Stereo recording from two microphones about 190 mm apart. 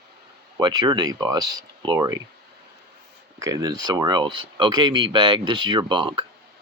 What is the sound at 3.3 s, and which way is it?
Speech, 20° right (ahead or behind).